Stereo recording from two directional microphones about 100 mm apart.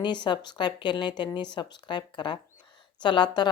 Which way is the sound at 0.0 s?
50° left (ahead or behind).